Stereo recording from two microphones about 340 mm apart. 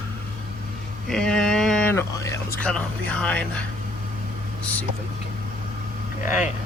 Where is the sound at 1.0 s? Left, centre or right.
Centre.